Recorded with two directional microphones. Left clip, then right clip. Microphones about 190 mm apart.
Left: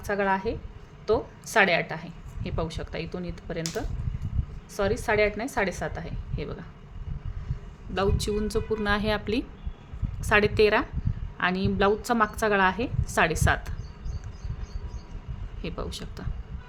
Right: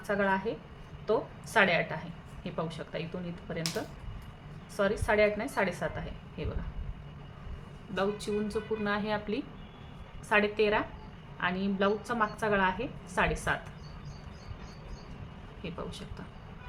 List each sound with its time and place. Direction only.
0.1 s a woman's voice: 45° left (ahead or behind)
4.7 s a woman's voice: 45° left (ahead or behind)
7.9 s a woman's voice: 50° left (ahead or behind)
15.6 s a woman's voice: 55° left (ahead or behind)